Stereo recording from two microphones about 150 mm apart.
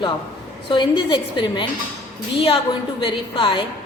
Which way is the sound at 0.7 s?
35° left (ahead or behind).